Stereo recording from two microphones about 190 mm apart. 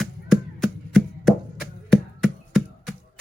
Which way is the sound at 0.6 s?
Centre (ahead or behind).